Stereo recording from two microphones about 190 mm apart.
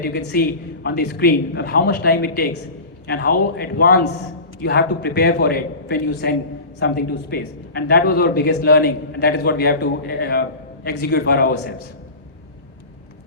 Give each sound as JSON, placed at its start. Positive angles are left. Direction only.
{"t": 0.0, "sound": "a man's voice", "side_deg": 60}